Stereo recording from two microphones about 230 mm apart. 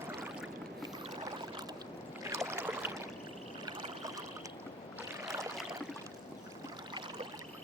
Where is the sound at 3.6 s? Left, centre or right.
Centre.